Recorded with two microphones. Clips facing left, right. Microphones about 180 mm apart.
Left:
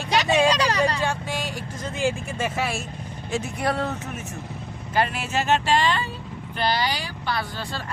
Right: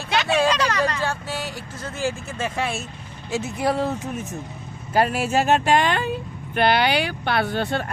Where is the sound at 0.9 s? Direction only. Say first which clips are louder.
Even; 15° left (ahead or behind).